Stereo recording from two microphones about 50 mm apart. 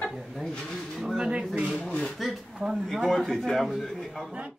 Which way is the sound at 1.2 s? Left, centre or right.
Right.